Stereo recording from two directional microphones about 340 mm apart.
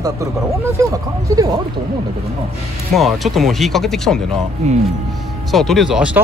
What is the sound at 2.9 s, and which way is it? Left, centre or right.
Speech, centre.